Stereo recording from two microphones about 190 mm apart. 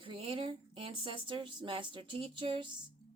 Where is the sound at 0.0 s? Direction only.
30° right (ahead or behind).